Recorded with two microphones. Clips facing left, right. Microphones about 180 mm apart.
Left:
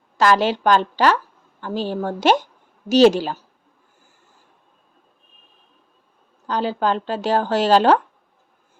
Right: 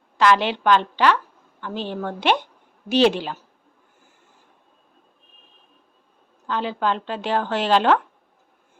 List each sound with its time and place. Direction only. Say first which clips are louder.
0.2 s speech: left 2 dB; 40° left (ahead or behind)
6.5 s speech: left 3 dB; 40° left (ahead or behind)